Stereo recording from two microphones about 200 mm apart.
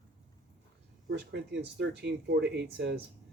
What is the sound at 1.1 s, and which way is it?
Speech, 60° right (ahead or behind).